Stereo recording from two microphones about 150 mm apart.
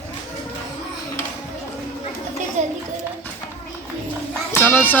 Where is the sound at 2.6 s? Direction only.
55° right (ahead or behind).